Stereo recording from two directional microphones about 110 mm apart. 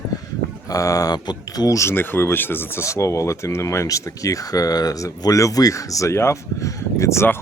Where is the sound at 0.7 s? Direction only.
30° left (ahead or behind).